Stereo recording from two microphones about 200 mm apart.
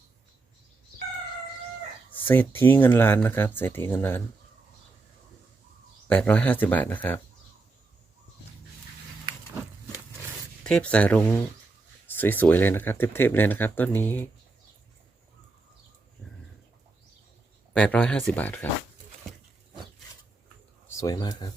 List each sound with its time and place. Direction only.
2.1 s speech: 10° left (ahead or behind)
6.1 s speech: 10° left (ahead or behind)
10.6 s speech: 5° left (ahead or behind)
17.7 s speech: 5° left (ahead or behind)
20.8 s speech: 15° left (ahead or behind)